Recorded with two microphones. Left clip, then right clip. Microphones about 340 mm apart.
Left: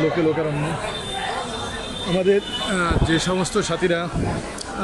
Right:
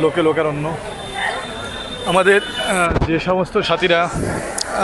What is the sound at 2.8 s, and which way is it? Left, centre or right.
Speech, centre.